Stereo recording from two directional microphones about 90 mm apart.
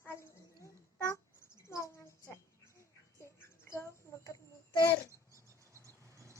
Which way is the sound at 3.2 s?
30° left (ahead or behind).